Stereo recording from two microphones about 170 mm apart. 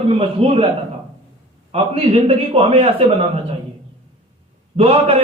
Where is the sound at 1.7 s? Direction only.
35° right (ahead or behind).